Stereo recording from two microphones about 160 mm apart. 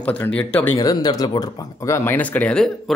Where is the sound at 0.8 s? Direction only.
25° left (ahead or behind).